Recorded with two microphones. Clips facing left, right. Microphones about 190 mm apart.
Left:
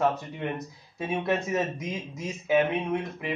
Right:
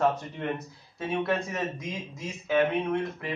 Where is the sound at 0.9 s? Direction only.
20° left (ahead or behind).